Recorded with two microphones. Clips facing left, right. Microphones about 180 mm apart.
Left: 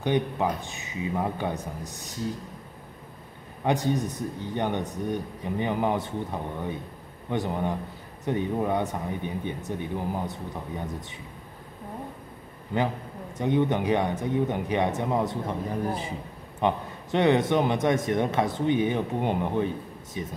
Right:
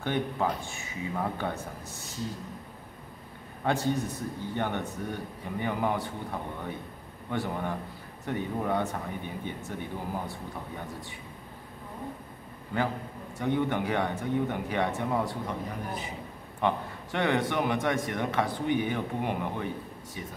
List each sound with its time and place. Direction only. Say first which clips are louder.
0.0 s speech: left 4 dB; 15° left (ahead or behind)
3.6 s speech: left 3 dB; 15° left (ahead or behind)
13.4 s speech: left 4 dB; 20° left (ahead or behind)